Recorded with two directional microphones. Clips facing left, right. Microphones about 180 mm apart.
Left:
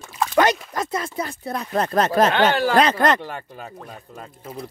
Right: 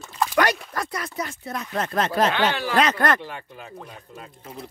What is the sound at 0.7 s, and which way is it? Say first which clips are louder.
Speech: left 4 dB; 25° left (ahead or behind).